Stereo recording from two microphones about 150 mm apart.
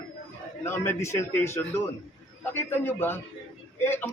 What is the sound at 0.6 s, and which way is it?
Speech, 15° left (ahead or behind).